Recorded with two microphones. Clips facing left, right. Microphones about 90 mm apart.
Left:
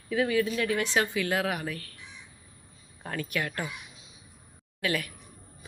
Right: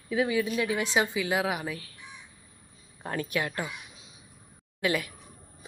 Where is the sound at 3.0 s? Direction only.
25° right (ahead or behind).